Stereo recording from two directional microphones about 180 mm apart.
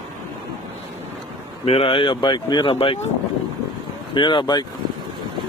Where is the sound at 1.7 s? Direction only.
30° left (ahead or behind).